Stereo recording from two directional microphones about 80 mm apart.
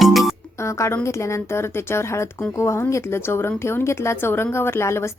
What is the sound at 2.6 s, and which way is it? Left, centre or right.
A woman's voice, left.